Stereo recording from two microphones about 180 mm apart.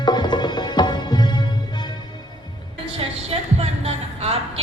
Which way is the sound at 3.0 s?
35° right (ahead or behind).